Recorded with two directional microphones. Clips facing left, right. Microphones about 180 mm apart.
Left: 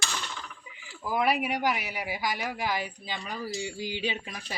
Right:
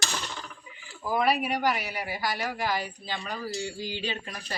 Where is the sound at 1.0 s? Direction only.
10° left (ahead or behind).